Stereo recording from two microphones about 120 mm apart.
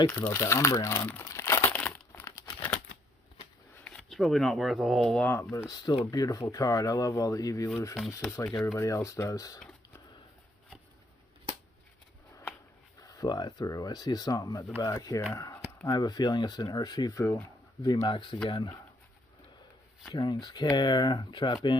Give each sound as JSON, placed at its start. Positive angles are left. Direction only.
{"t": 0.1, "sound": "speech", "side_deg": 15}
{"t": 1.2, "sound": "crumpling", "side_deg": 25}
{"t": 1.7, "sound": "crumpling", "side_deg": 10}
{"t": 2.2, "sound": "crumpling", "side_deg": 30}
{"t": 3.8, "sound": "speech", "side_deg": 5}
{"t": 5.1, "sound": "speech", "side_deg": 15}
{"t": 5.4, "sound": "speech", "side_deg": 25}
{"t": 13.0, "sound": "speech", "side_deg": 30}
{"t": 18.0, "sound": "speech", "side_deg": 45}
{"t": 20.1, "sound": "speech", "side_deg": 40}